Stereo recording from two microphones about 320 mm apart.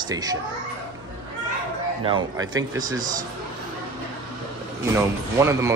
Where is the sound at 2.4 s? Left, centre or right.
Centre.